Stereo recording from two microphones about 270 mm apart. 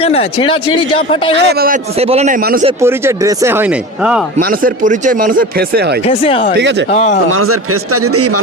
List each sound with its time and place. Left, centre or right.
0.0 s speech: left
1.5 s a man's voice: right
2.8 s speech: centre
4.4 s speech: right
6.1 s speech: centre
6.6 s speech: right
6.9 s speech: left
7.3 s a man's voice: right